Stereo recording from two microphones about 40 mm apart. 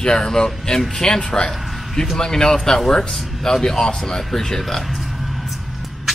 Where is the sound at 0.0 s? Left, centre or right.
Centre.